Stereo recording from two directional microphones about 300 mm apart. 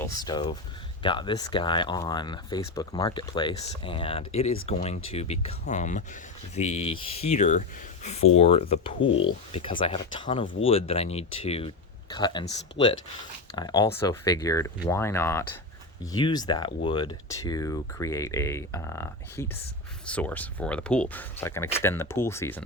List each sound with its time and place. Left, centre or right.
0.0 s speech: centre
13.6 s speech: centre